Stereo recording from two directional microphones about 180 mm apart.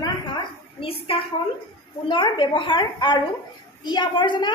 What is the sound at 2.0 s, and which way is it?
A woman's voice, 25° left (ahead or behind).